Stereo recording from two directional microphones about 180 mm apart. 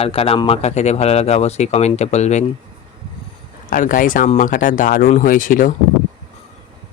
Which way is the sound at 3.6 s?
50° left (ahead or behind).